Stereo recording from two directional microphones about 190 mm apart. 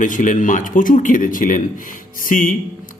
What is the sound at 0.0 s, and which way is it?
Speech, 40° left (ahead or behind).